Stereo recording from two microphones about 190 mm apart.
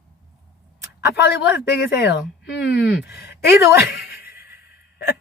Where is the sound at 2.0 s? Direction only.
70° left (ahead or behind).